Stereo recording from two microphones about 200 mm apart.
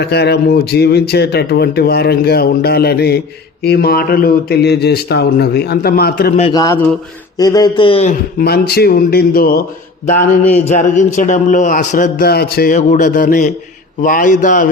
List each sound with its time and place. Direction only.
0.0 s speech: 55° left (ahead or behind)
6.5 s a man's voice: 15° left (ahead or behind)
8.4 s speech: 50° left (ahead or behind)
10.1 s a man's voice: 40° left (ahead or behind)